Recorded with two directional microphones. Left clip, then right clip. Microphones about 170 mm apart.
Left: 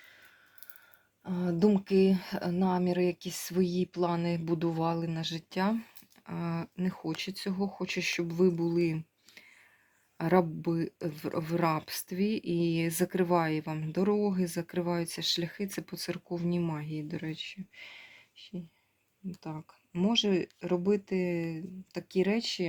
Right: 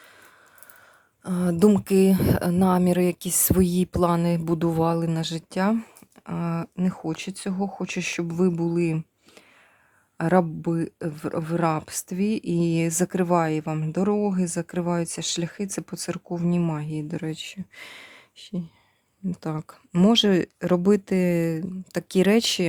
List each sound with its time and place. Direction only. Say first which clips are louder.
1.2 s speech: right 8 dB; 45° right (ahead or behind)
19.4 s speech: right 10 dB; 65° right (ahead or behind)